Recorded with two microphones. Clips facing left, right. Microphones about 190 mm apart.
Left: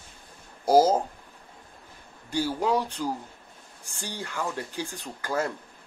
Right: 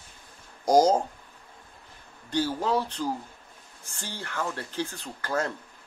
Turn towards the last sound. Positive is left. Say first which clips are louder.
# left 1 dB
turn(degrees=10)  # may be behind; listen again after turning